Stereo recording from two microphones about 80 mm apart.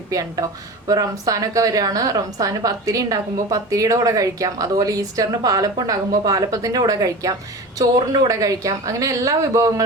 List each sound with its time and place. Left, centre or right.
0.1 s a woman's voice: right